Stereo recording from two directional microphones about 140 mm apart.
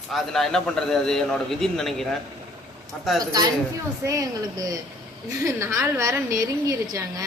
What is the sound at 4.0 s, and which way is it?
A woman's voice, 25° right (ahead or behind).